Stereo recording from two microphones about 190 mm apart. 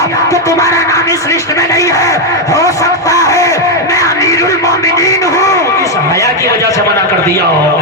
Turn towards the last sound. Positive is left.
turn(degrees=15)  # may be behind; listen again after turning